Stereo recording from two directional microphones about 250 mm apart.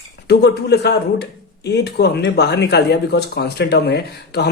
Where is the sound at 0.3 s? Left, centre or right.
Left.